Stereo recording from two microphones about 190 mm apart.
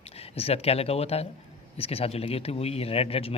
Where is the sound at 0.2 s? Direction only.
30° left (ahead or behind).